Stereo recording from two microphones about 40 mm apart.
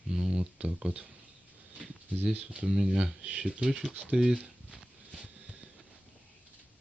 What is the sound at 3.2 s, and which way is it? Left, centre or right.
Speech, right.